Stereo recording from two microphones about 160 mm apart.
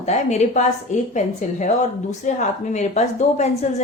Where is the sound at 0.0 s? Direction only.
45° left (ahead or behind).